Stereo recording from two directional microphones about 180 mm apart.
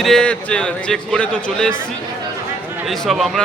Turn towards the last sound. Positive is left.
turn(degrees=0)  # may be behind; listen again after turning